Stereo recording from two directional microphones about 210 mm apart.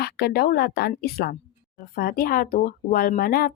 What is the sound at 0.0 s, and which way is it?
A woman's voice, 50° left (ahead or behind).